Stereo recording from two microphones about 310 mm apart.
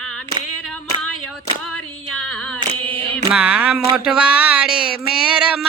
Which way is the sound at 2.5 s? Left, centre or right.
Centre.